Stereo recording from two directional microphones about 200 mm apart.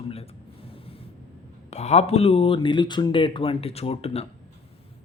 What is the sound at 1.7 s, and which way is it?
Speech, 35° left (ahead or behind).